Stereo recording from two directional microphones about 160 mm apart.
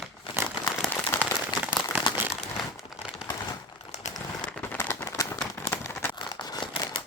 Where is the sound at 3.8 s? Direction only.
45° left (ahead or behind).